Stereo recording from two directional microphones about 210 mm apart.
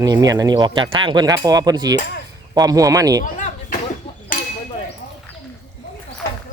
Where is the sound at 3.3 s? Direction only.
35° left (ahead or behind).